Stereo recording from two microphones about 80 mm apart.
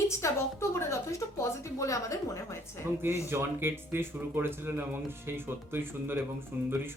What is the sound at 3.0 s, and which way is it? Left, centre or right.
Speech, right.